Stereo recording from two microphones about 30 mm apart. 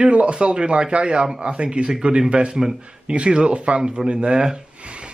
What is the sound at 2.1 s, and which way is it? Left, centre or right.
Speech, right.